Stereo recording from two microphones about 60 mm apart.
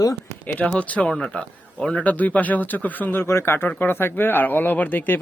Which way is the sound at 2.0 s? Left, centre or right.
Left.